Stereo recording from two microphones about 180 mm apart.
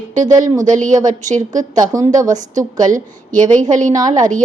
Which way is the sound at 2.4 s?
45° right (ahead or behind).